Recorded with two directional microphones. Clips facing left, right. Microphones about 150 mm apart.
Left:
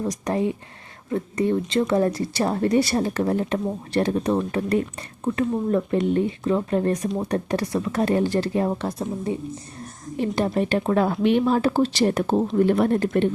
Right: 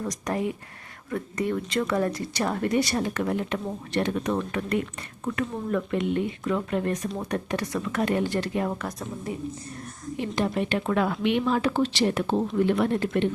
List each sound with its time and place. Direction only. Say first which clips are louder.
0.3 s speech: left 4 dB; 25° left (ahead or behind); by 13.2 s 45° left (ahead or behind)